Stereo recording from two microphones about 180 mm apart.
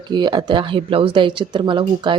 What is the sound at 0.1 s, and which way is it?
Speech, 25° right (ahead or behind).